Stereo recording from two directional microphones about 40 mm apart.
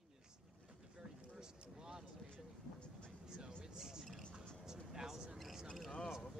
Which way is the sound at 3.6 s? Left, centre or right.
Centre.